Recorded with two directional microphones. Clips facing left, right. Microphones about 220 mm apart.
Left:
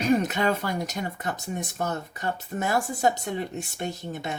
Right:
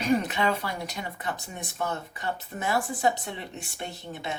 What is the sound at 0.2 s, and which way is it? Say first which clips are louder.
Speech: left 2 dB; 45° left (ahead or behind).